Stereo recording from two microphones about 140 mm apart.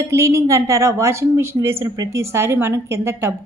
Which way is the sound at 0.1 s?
20° right (ahead or behind).